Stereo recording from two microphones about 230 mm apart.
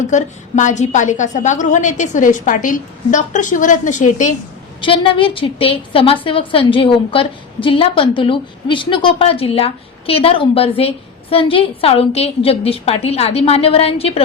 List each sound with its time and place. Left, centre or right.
0.1 s a woman's voice: left
4.8 s a woman's voice: left